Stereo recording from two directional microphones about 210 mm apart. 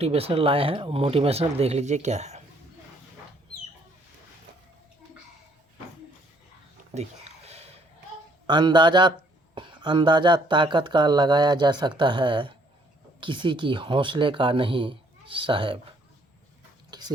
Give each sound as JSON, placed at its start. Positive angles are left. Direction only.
{"t": 0.0, "sound": "speech", "side_deg": -30}
{"t": 6.9, "sound": "a sound", "side_deg": -30}
{"t": 8.4, "sound": "speech", "side_deg": -20}
{"t": 16.9, "sound": "chewing", "side_deg": -20}